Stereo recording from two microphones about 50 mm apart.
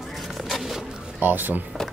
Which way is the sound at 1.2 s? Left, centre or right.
Right.